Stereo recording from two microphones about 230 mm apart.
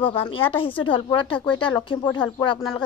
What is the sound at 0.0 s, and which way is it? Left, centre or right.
Speech, left.